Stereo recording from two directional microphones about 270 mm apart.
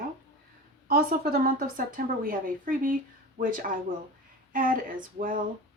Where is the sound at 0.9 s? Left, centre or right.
Right.